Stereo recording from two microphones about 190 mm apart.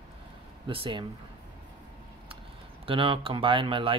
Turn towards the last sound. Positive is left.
turn(degrees=-30)  # may be behind; listen again after turning